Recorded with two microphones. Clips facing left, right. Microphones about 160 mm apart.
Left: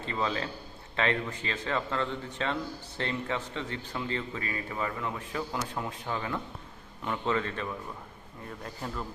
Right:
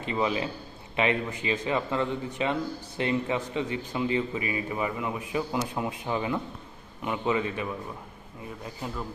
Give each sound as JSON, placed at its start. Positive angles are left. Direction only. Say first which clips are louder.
{"t": 0.0, "sound": "a man's voice", "louder": "right 4 dB", "side_deg": -15}